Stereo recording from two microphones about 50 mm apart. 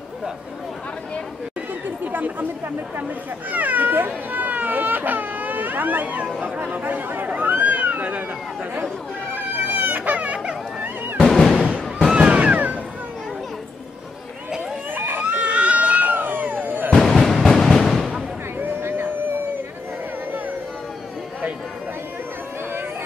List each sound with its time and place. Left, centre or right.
3.5 s speech: right
7.6 s cat: right
9.3 s a sound: right
11.1 s music: centre
12.1 s music: centre
15.0 s a sound: right
15.2 s fireworks: right
16.9 s music: centre
18.6 s a sound: right